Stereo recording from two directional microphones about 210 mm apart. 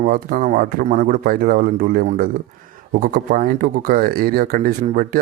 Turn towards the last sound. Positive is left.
turn(degrees=-40)  # may be behind; listen again after turning